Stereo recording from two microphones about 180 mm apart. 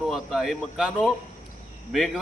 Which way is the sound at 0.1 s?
Centre (ahead or behind).